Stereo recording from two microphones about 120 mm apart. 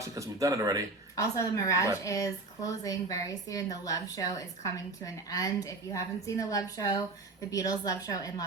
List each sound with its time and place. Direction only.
0.0 s speech: 25° right (ahead or behind)
1.1 s a woman's voice: 25° left (ahead or behind)